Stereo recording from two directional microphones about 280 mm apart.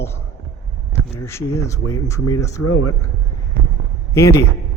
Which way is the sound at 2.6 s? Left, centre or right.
Left.